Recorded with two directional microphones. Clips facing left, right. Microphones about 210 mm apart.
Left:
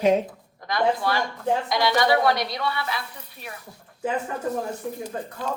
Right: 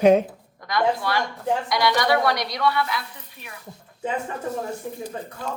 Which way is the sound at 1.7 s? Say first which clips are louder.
Even; 25° left (ahead or behind).